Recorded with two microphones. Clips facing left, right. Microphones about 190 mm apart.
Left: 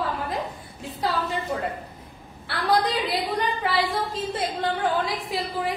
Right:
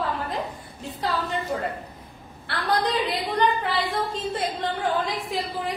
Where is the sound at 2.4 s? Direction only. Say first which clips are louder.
Left 2 dB; centre (ahead or behind).